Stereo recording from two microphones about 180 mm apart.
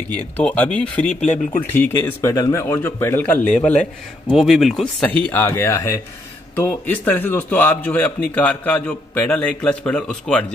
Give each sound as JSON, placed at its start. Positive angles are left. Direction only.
{"t": 0.4, "sound": "a man's voice", "side_deg": 5}
{"t": 1.2, "sound": "speech", "side_deg": 45}
{"t": 1.7, "sound": "a man's voice", "side_deg": 10}
{"t": 5.3, "sound": "a man's voice", "side_deg": 10}